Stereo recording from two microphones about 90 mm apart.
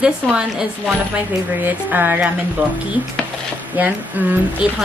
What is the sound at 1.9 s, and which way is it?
Speech, 20° right (ahead or behind).